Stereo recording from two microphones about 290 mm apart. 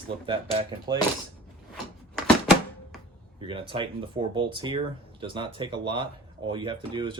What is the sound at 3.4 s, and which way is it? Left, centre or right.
Speech, centre.